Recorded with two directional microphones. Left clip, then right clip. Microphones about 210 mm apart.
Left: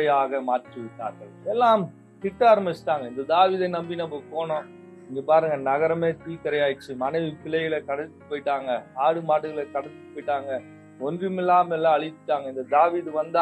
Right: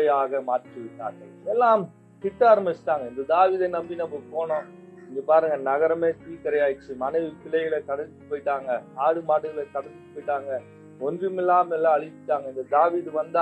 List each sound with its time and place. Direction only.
0.0 s speech: 25° left (ahead or behind)